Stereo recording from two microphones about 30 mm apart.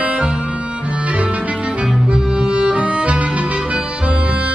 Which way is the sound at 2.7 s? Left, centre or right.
Right.